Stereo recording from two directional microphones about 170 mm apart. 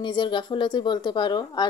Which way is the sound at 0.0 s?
25° left (ahead or behind).